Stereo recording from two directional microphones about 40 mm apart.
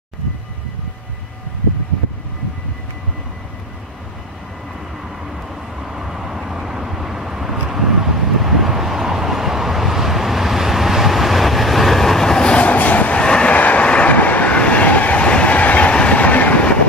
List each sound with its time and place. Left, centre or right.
5.9 s vehicle: centre
12.5 s vehicle: left
13.2 s vehicle: left
13.5 s vehicle: left
14.1 s train: left
15.9 s train: left